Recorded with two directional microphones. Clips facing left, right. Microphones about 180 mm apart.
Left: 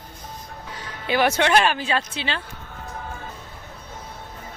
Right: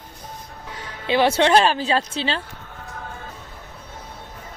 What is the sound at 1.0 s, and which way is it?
Speech, 25° right (ahead or behind).